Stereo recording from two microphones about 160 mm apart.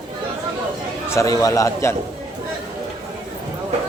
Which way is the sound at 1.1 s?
20° left (ahead or behind).